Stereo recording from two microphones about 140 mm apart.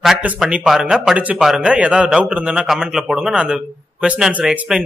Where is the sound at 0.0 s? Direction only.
5° right (ahead or behind).